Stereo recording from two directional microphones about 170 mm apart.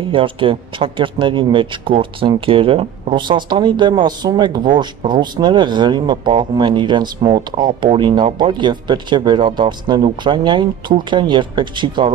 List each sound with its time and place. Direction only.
0.1 s speech: 30° right (ahead or behind)